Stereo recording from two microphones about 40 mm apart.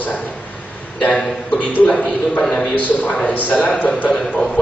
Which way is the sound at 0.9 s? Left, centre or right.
Left.